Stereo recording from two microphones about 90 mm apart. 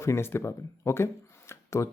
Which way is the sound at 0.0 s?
30° left (ahead or behind).